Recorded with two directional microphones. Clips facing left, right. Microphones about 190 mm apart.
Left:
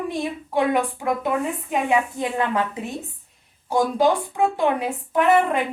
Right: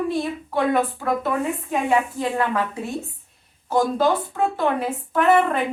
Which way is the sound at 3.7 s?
15° left (ahead or behind).